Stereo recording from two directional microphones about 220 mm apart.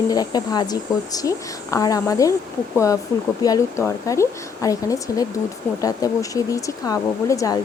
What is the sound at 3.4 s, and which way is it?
Speech, 15° left (ahead or behind).